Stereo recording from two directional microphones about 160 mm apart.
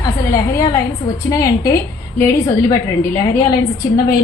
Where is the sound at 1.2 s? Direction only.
20° left (ahead or behind).